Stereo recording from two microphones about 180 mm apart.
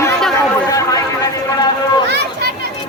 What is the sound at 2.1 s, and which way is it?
Children playing, 70° right (ahead or behind).